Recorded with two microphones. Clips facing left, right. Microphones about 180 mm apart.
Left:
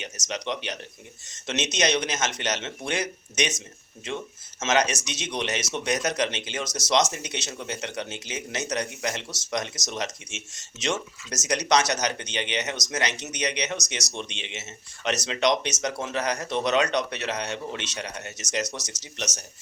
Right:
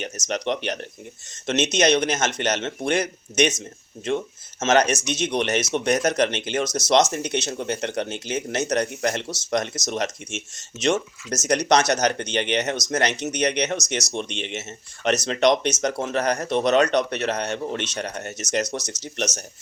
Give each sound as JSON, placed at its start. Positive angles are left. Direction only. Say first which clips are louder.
{"t": 0.0, "sound": "a man's voice", "louder": "right 6 dB", "side_deg": -55}
{"t": 4.6, "sound": "a man's voice", "louder": "right 5 dB", "side_deg": -55}
{"t": 14.0, "sound": "speech", "louder": "right 6 dB", "side_deg": -20}
{"t": 14.3, "sound": "a man's voice", "louder": "right 7 dB", "side_deg": -55}